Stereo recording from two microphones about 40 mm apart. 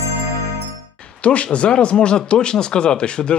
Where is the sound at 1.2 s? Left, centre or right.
Left.